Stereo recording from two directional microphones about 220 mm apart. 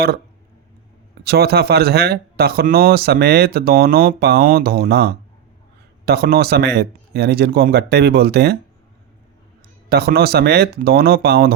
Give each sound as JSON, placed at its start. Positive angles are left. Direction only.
{"t": 1.2, "sound": "speech", "side_deg": -45}
{"t": 9.9, "sound": "speech", "side_deg": -45}